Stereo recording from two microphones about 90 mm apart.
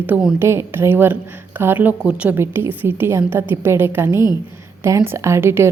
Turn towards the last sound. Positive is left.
turn(degrees=-30)  # may be behind; listen again after turning